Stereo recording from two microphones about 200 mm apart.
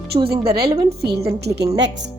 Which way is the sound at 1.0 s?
55° right (ahead or behind).